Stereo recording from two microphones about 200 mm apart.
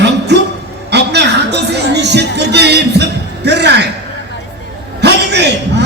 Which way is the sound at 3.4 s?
55° right (ahead or behind).